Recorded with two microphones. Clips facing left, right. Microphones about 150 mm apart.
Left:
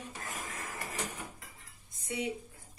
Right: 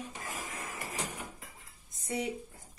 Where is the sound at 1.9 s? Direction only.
40° right (ahead or behind).